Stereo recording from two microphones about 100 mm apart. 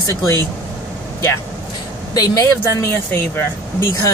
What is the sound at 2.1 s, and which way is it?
Speech, 40° left (ahead or behind).